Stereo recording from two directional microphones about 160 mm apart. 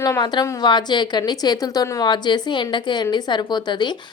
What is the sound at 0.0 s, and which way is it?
A woman's voice, 25° left (ahead or behind).